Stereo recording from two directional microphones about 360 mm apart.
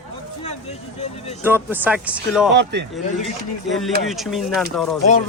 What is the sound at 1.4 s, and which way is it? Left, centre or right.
Speech, centre.